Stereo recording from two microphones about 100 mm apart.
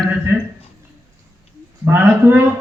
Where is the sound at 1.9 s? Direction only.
25° right (ahead or behind).